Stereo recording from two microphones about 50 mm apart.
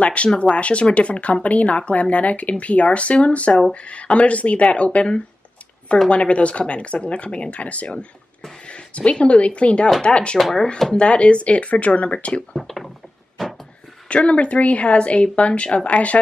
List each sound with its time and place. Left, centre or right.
0.0 s speech: left
12.5 s speech: centre
13.4 s a sound: centre
14.0 s speech: left